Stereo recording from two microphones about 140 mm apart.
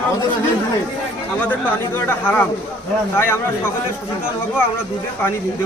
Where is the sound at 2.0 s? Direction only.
15° left (ahead or behind).